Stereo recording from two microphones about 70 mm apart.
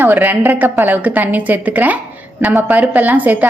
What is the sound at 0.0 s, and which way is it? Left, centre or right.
A woman's voice, right.